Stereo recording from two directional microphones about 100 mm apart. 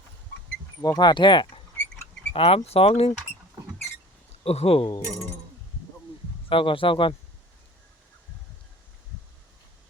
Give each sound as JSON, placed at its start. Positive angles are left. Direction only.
{"t": 0.8, "sound": "speech", "side_deg": 40}
{"t": 2.3, "sound": "speech", "side_deg": 70}
{"t": 2.6, "sound": "mechanisms", "side_deg": 80}
{"t": 4.4, "sound": "mechanisms", "side_deg": 80}
{"t": 6.5, "sound": "speech", "side_deg": 60}